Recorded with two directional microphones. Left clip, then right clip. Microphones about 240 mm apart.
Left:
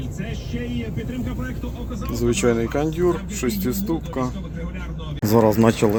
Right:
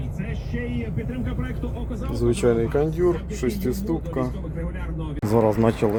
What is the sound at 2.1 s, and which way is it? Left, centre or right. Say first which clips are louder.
Speech: left 1 dB; centre.